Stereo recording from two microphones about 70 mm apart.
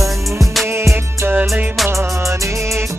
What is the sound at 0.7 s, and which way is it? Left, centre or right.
Music, right.